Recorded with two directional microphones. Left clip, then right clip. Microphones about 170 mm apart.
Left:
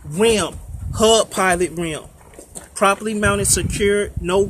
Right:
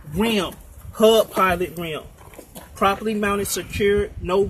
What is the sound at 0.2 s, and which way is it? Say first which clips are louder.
Speech: left 6 dB; 40° left (ahead or behind).